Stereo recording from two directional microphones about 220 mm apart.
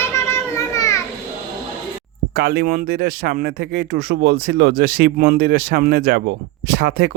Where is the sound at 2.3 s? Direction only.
45° right (ahead or behind).